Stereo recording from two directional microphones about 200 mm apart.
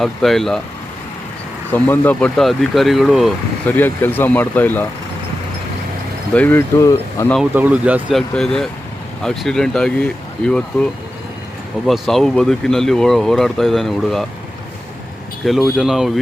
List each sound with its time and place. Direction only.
0.0 s speech: centre (ahead or behind)
1.7 s speech: 10° left (ahead or behind)
6.3 s speech: 10° left (ahead or behind)
7.3 s speech: 5° right (ahead or behind)
11.9 s speech: centre (ahead or behind)
15.4 s speech: centre (ahead or behind)